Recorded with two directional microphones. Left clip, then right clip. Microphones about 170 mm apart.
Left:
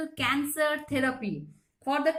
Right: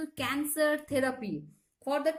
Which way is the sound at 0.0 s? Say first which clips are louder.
Left 5 dB; 50° right (ahead or behind).